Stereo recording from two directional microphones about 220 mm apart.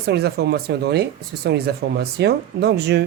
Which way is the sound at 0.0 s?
45° right (ahead or behind).